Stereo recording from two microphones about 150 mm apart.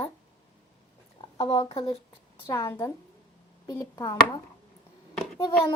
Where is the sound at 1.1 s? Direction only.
35° left (ahead or behind).